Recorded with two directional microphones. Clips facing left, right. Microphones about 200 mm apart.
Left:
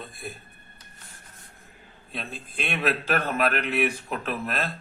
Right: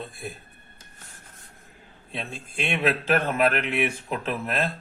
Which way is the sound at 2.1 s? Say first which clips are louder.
Right 1 dB; 25° right (ahead or behind).